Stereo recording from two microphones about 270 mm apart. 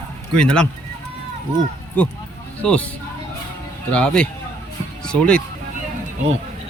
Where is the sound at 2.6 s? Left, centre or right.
Centre.